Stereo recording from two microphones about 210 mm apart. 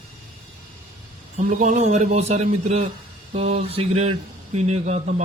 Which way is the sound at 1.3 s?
35° right (ahead or behind).